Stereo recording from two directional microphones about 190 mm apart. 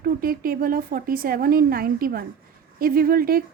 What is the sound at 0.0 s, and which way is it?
A woman's voice, 50° right (ahead or behind).